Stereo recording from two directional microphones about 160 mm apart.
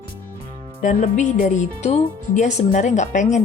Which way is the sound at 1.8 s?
45° left (ahead or behind).